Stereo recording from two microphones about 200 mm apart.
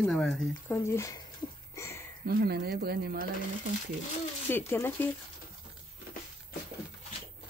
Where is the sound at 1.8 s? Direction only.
15° left (ahead or behind).